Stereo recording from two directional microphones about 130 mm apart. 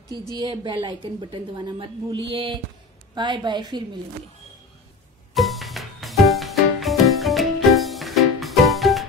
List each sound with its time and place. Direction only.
0.4 s a woman's voice: 35° right (ahead or behind)
5.3 s music: centre (ahead or behind)